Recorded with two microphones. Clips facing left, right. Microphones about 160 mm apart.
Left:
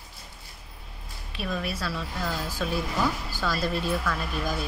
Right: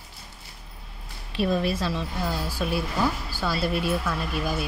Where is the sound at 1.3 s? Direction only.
30° right (ahead or behind).